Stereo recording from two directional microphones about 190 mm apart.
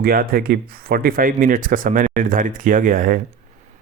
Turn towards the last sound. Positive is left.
turn(degrees=-45)  # may be behind; listen again after turning